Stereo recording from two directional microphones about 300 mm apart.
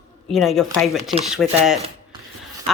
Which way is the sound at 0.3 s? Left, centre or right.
Centre.